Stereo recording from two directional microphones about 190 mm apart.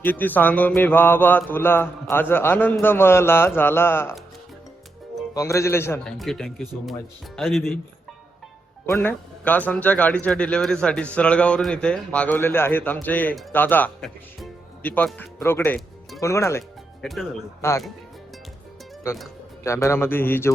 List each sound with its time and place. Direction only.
0.0 s speech: 10° left (ahead or behind)
5.3 s speech: 15° left (ahead or behind)
6.1 s speech: centre (ahead or behind)
9.0 s speech: 10° left (ahead or behind)
17.0 s speech: centre (ahead or behind)
17.6 s speech: 15° left (ahead or behind)
19.1 s speech: 15° left (ahead or behind)